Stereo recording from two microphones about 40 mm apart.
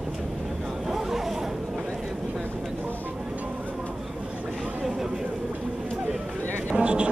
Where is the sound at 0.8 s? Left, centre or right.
Centre.